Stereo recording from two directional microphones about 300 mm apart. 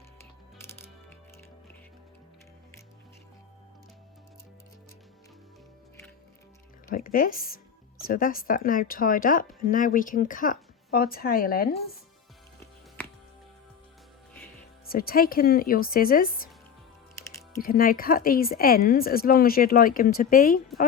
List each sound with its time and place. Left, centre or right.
6.8 s a woman's voice: left
14.8 s a woman's voice: left
17.6 s a woman's voice: left